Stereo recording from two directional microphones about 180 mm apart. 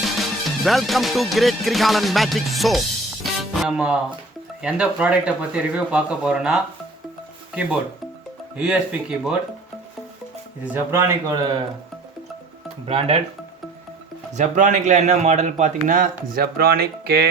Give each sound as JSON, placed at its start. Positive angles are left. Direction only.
{"t": 0.0, "sound": "music", "side_deg": 0}
{"t": 3.5, "sound": "speech", "side_deg": 0}
{"t": 8.5, "sound": "speech", "side_deg": -5}
{"t": 10.6, "sound": "speech", "side_deg": -10}
{"t": 12.9, "sound": "speech", "side_deg": -30}
{"t": 14.3, "sound": "speech", "side_deg": -45}
{"t": 16.3, "sound": "speech", "side_deg": -55}